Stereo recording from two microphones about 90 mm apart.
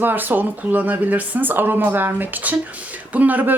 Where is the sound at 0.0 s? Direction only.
20° right (ahead or behind).